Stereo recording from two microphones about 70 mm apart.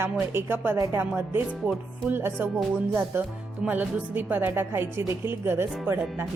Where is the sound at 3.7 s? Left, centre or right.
Right.